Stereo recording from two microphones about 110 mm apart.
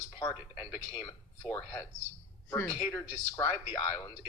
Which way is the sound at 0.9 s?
45° left (ahead or behind).